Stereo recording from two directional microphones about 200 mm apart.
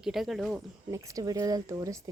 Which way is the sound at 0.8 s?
15° right (ahead or behind).